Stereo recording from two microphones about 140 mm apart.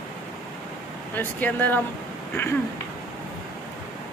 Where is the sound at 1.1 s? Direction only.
15° left (ahead or behind).